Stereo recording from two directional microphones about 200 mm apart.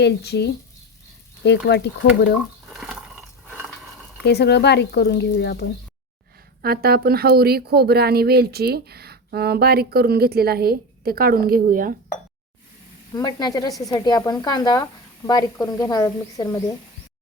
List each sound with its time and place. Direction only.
0.0 s speech: 55° left (ahead or behind)
2.6 s a sound: centre (ahead or behind)
4.2 s speech: 55° left (ahead or behind)
6.6 s speech: 50° right (ahead or behind)
13.1 s speech: 20° left (ahead or behind)